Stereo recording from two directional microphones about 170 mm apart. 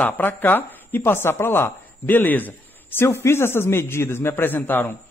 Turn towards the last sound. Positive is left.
turn(degrees=10)  # may be behind; listen again after turning